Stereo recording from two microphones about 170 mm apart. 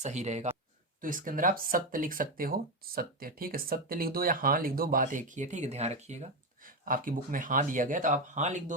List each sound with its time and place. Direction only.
0.0 s speech: 40° right (ahead or behind)
1.0 s speech: 55° right (ahead or behind)